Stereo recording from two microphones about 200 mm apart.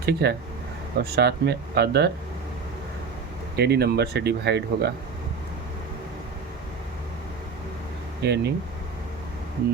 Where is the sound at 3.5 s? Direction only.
55° right (ahead or behind).